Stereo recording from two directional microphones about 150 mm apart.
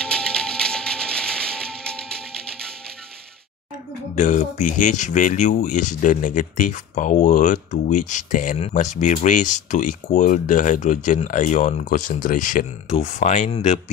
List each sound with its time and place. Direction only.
0.0 s music: 5° left (ahead or behind)
4.1 s speech: 55° left (ahead or behind)
12.9 s speech: 50° left (ahead or behind)